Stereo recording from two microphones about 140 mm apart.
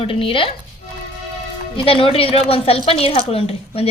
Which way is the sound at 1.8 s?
40° left (ahead or behind).